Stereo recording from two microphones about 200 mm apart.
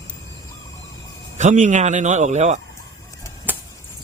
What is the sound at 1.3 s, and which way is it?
Speech, 35° right (ahead or behind).